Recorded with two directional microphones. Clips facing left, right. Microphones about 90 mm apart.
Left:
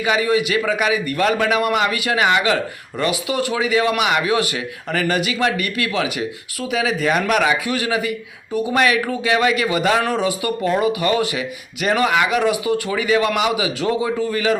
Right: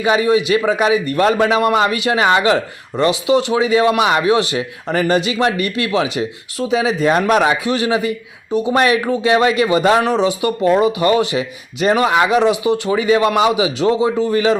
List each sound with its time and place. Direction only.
0.0 s speech: 30° right (ahead or behind)